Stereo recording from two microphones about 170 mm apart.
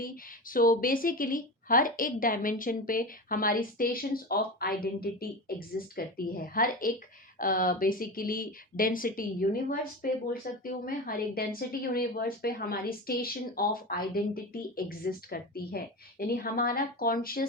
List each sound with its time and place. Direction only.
0.5 s speech: 55° left (ahead or behind)